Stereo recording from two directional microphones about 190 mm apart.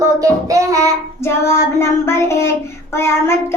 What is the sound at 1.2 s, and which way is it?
Child singing, 15° left (ahead or behind).